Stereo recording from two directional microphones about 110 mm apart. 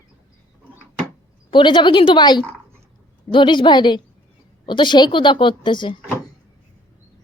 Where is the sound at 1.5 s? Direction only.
45° left (ahead or behind).